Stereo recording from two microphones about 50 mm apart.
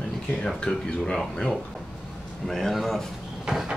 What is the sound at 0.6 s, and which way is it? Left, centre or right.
Speech, centre.